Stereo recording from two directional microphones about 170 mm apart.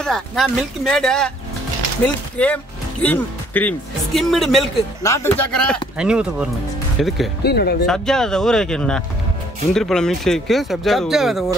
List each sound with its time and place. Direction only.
0.0 s speech: centre (ahead or behind)
5.0 s speech: 15° left (ahead or behind)
5.9 s speech: 5° right (ahead or behind)
7.4 s speech: 70° left (ahead or behind)
7.8 s speech: 5° left (ahead or behind)